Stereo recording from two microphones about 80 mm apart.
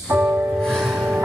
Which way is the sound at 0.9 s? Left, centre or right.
Centre.